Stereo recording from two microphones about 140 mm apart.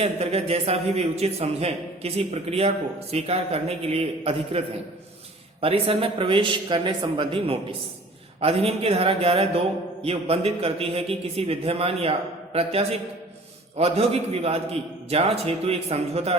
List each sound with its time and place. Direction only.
0.0 s a man's voice: 45° right (ahead or behind)
13.7 s a man's voice: 45° right (ahead or behind)